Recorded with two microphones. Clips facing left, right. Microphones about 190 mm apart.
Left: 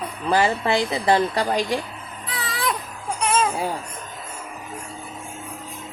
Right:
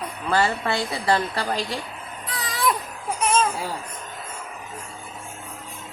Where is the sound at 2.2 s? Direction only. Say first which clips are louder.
Right 2 dB; centre (ahead or behind).